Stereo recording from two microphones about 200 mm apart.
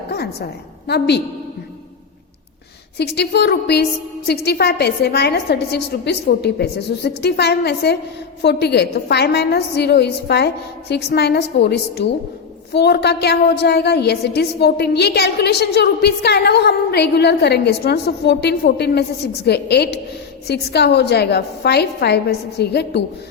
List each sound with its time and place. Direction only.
0.1 s a woman's voice: 55° left (ahead or behind)
3.0 s a woman's voice: 55° left (ahead or behind)